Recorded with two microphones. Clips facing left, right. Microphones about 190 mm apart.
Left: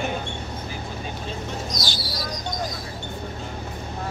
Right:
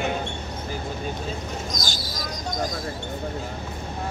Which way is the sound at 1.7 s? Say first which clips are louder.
Left 1 dB; 45° right (ahead or behind).